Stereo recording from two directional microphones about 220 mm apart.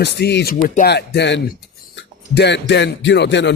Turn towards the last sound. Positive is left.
turn(degrees=55)  # may be behind; listen again after turning